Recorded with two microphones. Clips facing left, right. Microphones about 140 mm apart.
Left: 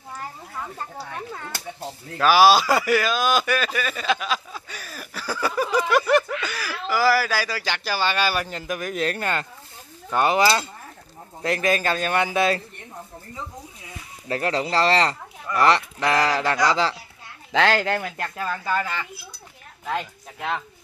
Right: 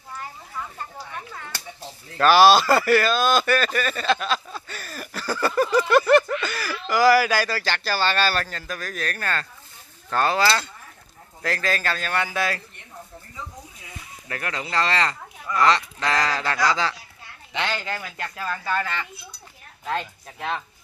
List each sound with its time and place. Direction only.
2.1 s speech: 10° left (ahead or behind)
14.2 s speech: 30° left (ahead or behind)
17.5 s speech: 90° left; by 18.3 s 50° left (ahead or behind)
18.4 s speech: 10° left (ahead or behind)